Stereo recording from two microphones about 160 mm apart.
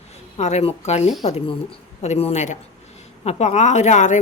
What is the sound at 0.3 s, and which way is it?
Speech, 45° left (ahead or behind).